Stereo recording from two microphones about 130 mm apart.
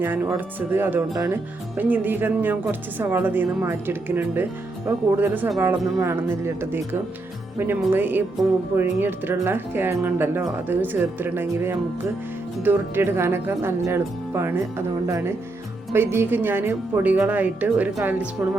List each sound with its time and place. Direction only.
0.0 s speech: 15° right (ahead or behind)
7.9 s speech: 15° right (ahead or behind)